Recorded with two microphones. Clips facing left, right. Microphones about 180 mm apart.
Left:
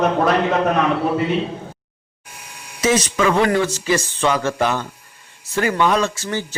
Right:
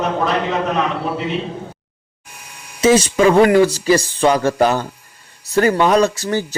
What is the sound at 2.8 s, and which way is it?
A man's voice, 30° right (ahead or behind).